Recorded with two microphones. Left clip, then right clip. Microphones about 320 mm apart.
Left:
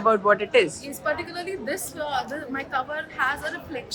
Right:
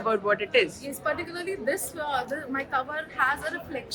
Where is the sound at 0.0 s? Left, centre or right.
Centre.